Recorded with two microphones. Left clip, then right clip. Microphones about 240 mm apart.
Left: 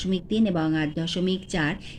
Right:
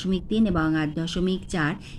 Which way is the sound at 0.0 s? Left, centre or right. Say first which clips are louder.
Even; centre.